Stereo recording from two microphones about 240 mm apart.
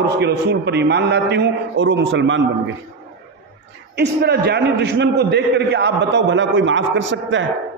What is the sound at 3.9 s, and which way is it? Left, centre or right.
A man's voice, right.